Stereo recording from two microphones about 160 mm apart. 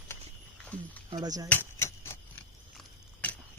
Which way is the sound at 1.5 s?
15° left (ahead or behind).